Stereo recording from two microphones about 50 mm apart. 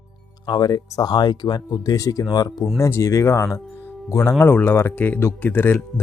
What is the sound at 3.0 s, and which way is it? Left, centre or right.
Speech, left.